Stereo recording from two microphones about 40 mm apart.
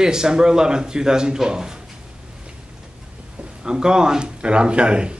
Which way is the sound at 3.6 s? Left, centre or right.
Centre.